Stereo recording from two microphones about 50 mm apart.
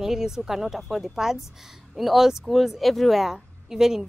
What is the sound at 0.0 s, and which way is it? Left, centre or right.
A woman's voice, centre.